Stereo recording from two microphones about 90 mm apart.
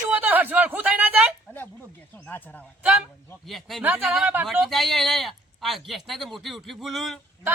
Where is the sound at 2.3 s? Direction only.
15° left (ahead or behind).